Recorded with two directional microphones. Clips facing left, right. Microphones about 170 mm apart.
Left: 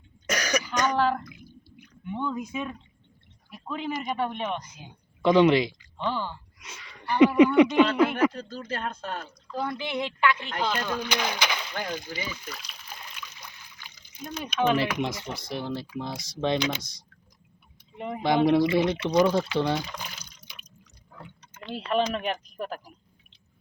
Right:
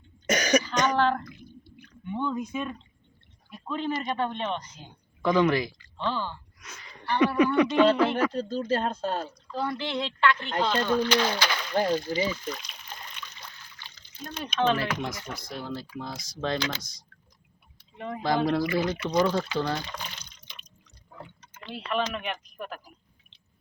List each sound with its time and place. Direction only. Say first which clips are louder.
0.3 s cough: right 4 dB; 20° right (ahead or behind)
0.9 s a sound: even; 5° left (ahead or behind)
3.5 s speech: right 2 dB; 5° left (ahead or behind)
5.2 s speech: left 4 dB; 20° left (ahead or behind)
8.3 s speech: right 8 dB; 30° right (ahead or behind)
9.7 s speech: even; 15° left (ahead or behind)
11.7 s speech: right 8 dB; 30° right (ahead or behind)
12.3 s trickle: right 6 dB; 5° left (ahead or behind)
14.4 s speech: left 1 dB; 10° left (ahead or behind)
17.9 s speech: left 3 dB; 20° left (ahead or behind)
19.1 s speech: left 3 dB; 10° left (ahead or behind)
21.8 s speech: left 4 dB; 35° left (ahead or behind)